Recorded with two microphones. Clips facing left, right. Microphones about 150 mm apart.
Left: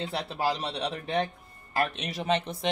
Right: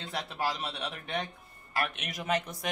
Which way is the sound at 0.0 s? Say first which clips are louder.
Left 4 dB; 30° left (ahead or behind).